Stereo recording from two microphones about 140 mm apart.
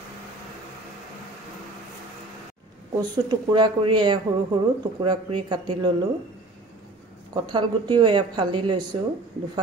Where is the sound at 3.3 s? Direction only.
30° right (ahead or behind).